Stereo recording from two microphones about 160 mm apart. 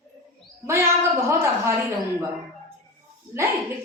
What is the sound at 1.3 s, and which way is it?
Speech, 15° right (ahead or behind).